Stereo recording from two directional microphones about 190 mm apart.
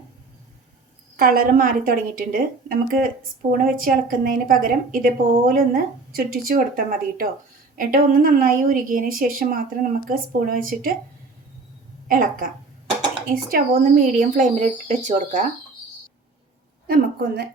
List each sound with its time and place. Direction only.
1.1 s a woman's voice: 50° right (ahead or behind)
12.0 s a woman's voice: 45° right (ahead or behind)
16.8 s a woman's voice: 55° right (ahead or behind)